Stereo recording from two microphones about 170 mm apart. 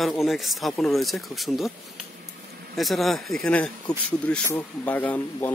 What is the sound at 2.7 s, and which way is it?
Speech, centre (ahead or behind).